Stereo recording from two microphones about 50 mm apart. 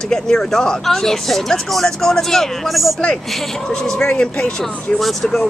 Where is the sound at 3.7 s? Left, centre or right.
Centre.